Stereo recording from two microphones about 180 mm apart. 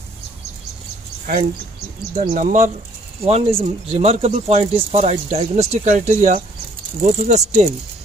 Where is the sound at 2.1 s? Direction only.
45° right (ahead or behind).